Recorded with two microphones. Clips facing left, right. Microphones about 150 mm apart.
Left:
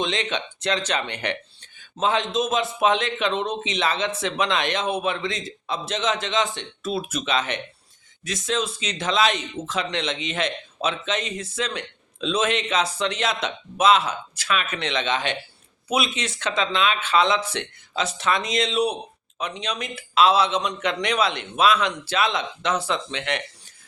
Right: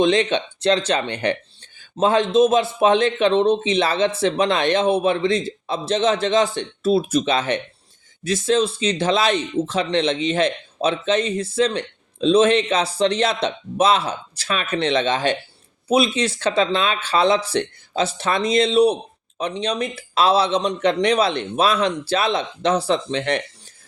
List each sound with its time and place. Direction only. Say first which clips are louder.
0.0 s speech: right 9 dB; 35° right (ahead or behind)